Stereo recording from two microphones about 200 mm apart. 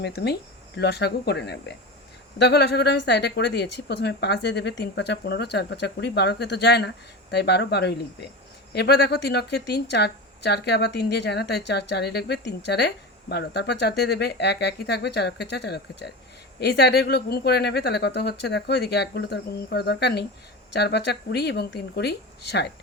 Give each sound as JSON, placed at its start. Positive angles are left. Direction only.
{"t": 0.0, "sound": "speech", "side_deg": 55}